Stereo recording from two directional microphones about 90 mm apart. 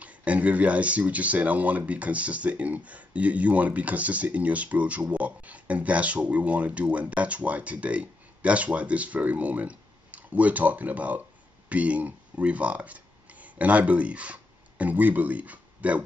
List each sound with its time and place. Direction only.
0.0 s speech: 15° right (ahead or behind)